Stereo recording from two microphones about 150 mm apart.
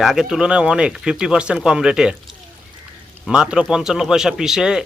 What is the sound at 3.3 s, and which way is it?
Speech, 5° right (ahead or behind).